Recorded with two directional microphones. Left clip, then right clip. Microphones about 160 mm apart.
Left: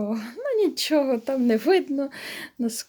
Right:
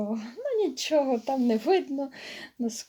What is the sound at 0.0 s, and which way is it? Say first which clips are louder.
Speech: left 3 dB; 30° left (ahead or behind).